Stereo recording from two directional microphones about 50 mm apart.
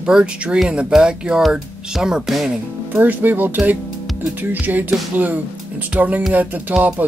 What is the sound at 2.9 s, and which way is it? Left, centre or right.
Speech, right.